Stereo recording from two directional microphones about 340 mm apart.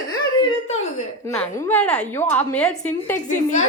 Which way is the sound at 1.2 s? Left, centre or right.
Centre.